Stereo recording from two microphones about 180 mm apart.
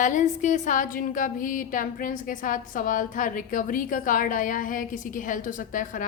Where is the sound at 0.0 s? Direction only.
45° left (ahead or behind).